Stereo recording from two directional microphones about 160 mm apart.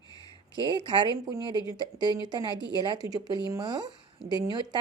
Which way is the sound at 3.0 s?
20° right (ahead or behind).